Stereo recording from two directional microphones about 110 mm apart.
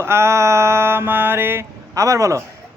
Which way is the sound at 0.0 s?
25° right (ahead or behind).